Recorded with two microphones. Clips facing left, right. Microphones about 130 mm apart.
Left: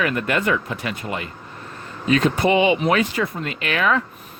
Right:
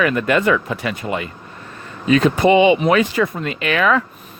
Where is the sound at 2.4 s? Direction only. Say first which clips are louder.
Right 5 dB; 90° right.